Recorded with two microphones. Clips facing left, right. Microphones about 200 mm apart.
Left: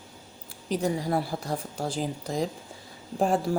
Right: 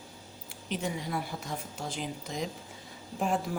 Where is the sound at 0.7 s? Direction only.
35° left (ahead or behind).